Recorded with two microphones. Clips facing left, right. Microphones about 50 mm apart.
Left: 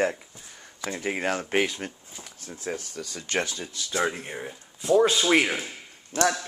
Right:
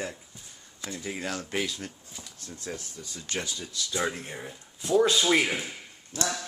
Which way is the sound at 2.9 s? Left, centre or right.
Left.